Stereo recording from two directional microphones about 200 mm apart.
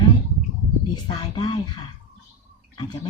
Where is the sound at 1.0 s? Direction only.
20° left (ahead or behind).